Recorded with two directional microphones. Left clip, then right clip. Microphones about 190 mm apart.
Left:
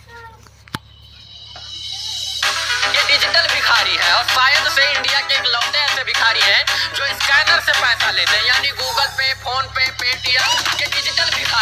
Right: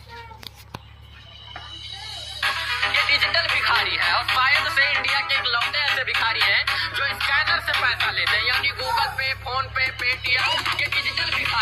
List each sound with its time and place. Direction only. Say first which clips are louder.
1.7 s music: left 11 dB; 40° left (ahead or behind)